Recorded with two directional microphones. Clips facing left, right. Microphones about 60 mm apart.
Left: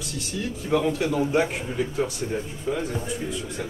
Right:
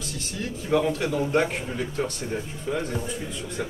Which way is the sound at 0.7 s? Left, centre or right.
Centre.